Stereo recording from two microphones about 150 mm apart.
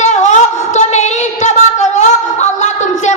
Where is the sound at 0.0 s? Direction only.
50° left (ahead or behind).